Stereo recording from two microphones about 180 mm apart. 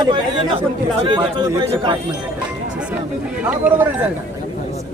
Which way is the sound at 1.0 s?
25° right (ahead or behind).